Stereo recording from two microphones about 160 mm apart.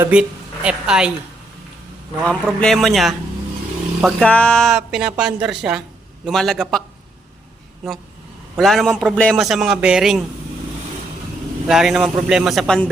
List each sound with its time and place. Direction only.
0.0 s speech: 5° right (ahead or behind)
2.2 s a woman's voice: 5° left (ahead or behind)
8.5 s a woman's voice: centre (ahead or behind)
11.7 s a woman's voice: 5° right (ahead or behind)